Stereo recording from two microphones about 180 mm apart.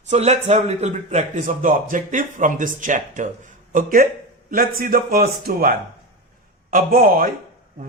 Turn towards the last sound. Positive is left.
turn(degrees=-50)  # may be behind; listen again after turning